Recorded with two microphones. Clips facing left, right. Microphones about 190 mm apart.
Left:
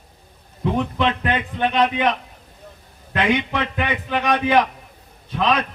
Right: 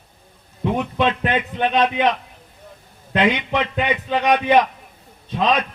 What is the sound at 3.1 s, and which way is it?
A man's voice, 20° right (ahead or behind).